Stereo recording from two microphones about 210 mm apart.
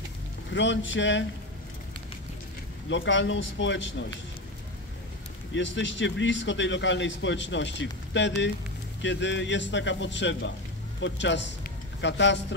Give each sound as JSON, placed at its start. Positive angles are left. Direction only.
{"t": 0.5, "sound": "speech", "side_deg": 60}
{"t": 2.9, "sound": "speech", "side_deg": 60}
{"t": 5.5, "sound": "speech", "side_deg": 60}